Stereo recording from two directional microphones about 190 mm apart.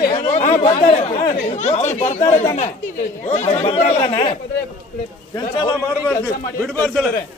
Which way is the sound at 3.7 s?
30° left (ahead or behind).